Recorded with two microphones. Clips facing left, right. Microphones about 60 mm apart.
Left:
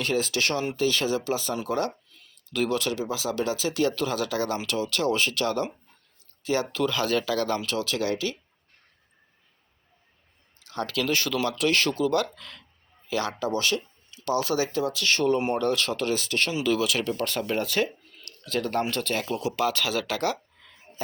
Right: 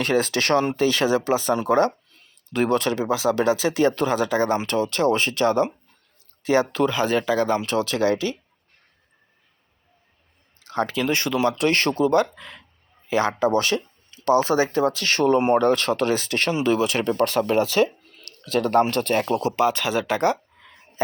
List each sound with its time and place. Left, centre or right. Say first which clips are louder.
0.0 s speech: right 4 dB; right
0.8 s speech: right 5 dB; right
6.9 s speech: right 4 dB; right
7.6 s speech: right 6 dB; right
10.6 s speech: right 5 dB; right
11.5 s speech: right 3 dB; right
12.2 s speech: right 5 dB; right
18.0 s a sound: right 1 dB; right
18.5 s speech: right 7 dB; right
19.5 s speech: right 5 dB; right